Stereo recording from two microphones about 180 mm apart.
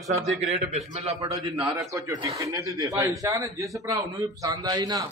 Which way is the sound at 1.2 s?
15° right (ahead or behind).